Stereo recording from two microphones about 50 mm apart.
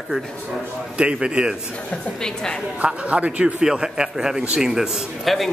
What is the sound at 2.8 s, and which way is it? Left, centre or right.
A man's voice, right.